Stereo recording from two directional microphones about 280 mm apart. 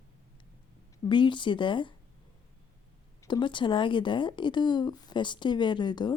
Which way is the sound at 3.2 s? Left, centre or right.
Centre.